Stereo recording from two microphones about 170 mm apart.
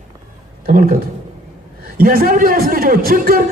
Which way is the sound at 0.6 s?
55° right (ahead or behind).